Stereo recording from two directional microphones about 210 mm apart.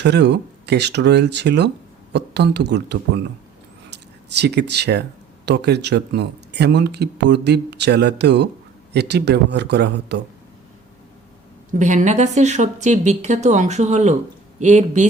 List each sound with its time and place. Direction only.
0.0 s speech: 55° right (ahead or behind)
4.4 s speech: 50° right (ahead or behind)
11.8 s speech: 35° right (ahead or behind)